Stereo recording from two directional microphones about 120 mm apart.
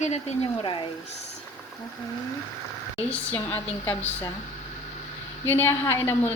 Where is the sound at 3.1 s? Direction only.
15° left (ahead or behind).